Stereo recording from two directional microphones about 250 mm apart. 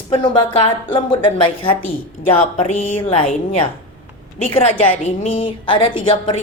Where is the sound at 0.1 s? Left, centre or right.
Centre.